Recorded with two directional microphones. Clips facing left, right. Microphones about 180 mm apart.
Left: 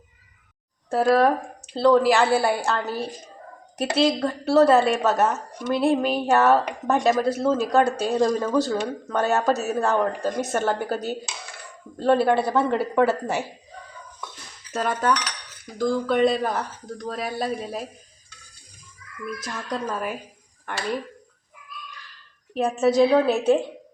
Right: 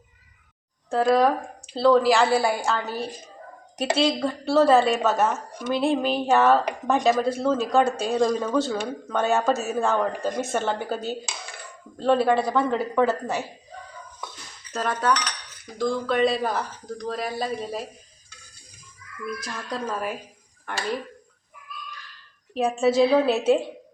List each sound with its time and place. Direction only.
0.9 s a woman's voice: 5° left (ahead or behind)
14.7 s cutlery: 5° left (ahead or behind)
15.8 s a woman's voice: 5° left (ahead or behind)
19.5 s a woman's voice: centre (ahead or behind)
22.5 s a woman's voice: centre (ahead or behind)